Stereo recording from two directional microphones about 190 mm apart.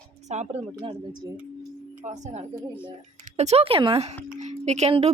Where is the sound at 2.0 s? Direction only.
40° right (ahead or behind).